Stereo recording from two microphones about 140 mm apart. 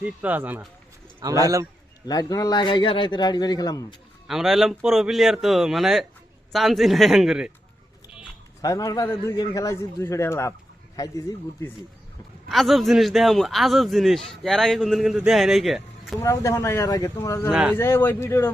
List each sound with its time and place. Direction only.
0.0 s speech: 10° right (ahead or behind)
1.2 s a man's voice: 25° right (ahead or behind)
2.0 s a man's voice: 25° left (ahead or behind)
4.3 s a man's voice: centre (ahead or behind)
8.6 s a man's voice: 25° left (ahead or behind)
12.5 s a man's voice: centre (ahead or behind)
16.2 s a man's voice: 20° left (ahead or behind)
17.5 s speech: 5° right (ahead or behind)
17.7 s speech: 15° left (ahead or behind)